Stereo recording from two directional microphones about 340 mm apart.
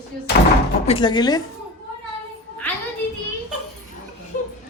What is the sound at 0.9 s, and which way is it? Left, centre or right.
Speech, centre.